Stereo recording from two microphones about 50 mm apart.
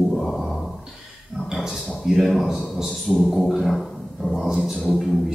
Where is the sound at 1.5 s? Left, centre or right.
Centre.